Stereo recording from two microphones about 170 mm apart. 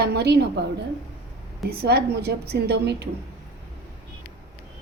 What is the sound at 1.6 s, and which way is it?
A woman's voice, 65° right (ahead or behind).